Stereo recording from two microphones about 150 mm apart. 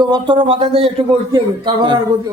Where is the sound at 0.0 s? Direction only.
30° right (ahead or behind).